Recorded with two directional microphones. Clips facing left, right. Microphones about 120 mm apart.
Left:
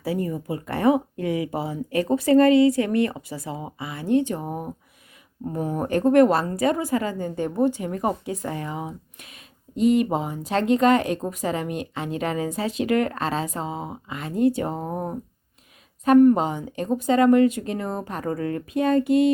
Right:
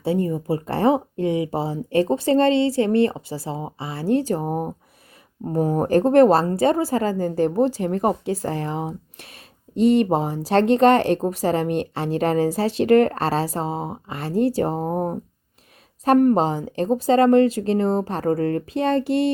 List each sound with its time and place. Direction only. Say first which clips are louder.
0.0 s a woman's voice: right 4 dB; 25° right (ahead or behind)